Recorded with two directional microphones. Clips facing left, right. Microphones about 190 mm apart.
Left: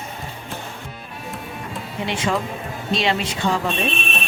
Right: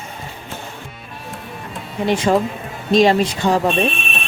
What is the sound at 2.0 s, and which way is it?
Speech, 40° right (ahead or behind).